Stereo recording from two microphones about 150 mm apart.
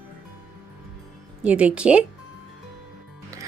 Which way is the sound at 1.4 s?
10° right (ahead or behind).